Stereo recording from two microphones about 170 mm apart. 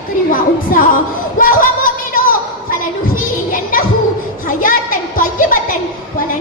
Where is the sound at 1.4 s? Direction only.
55° left (ahead or behind).